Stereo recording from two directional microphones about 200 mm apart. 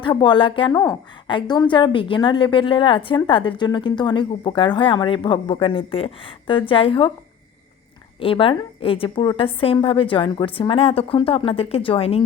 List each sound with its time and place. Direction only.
0.0 s a woman's voice: 25° left (ahead or behind)
8.2 s a woman's voice: 25° left (ahead or behind)